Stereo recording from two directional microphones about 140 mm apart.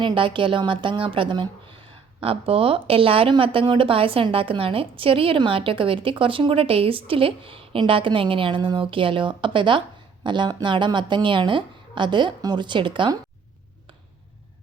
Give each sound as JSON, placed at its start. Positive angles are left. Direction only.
{"t": 0.0, "sound": "speech", "side_deg": -35}